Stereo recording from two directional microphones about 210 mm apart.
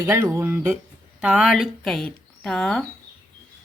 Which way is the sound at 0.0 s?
15° right (ahead or behind).